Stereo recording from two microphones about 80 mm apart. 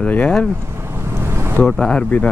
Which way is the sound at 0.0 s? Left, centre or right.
Centre.